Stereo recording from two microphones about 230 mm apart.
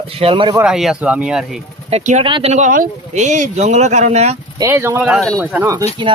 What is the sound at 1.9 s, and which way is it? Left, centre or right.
Speech, right.